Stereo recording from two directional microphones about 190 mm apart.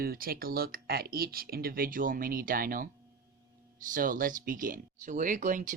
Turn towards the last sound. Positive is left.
turn(degrees=-40)  # may be behind; listen again after turning